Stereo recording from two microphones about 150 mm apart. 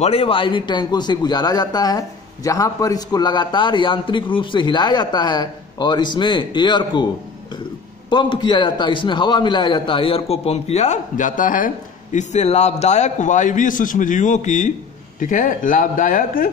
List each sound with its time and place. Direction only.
0.0 s a man's voice: 40° left (ahead or behind)
8.1 s a man's voice: 30° left (ahead or behind); by 16.4 s 65° left (ahead or behind)